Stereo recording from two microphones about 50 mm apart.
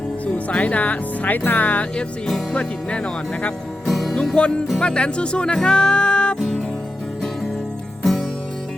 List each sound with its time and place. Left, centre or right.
0.3 s speech: left
2.0 s music: centre
2.5 s speech: left
3.8 s music: centre
4.1 s music: centre
4.8 s speech: centre
8.0 s music: centre